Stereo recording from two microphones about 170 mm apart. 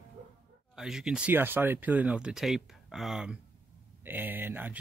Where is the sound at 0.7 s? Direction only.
Centre (ahead or behind).